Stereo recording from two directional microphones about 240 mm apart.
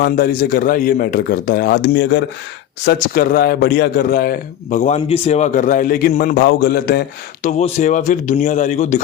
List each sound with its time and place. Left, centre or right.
0.0 s a man's voice: left
7.4 s a man's voice: left